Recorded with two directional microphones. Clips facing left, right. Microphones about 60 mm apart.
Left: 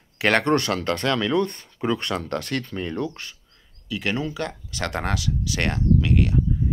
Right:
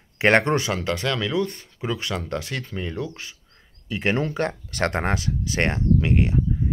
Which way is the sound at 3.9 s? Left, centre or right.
Right.